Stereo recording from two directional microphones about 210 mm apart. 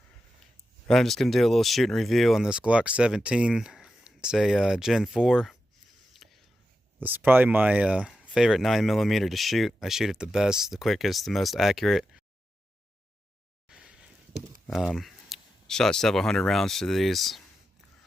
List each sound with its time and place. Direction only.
0.9 s speech: centre (ahead or behind)
6.2 s whispering: centre (ahead or behind)
7.0 s speech: 10° right (ahead or behind)
13.7 s a sound: 5° right (ahead or behind)
14.7 s speech: centre (ahead or behind)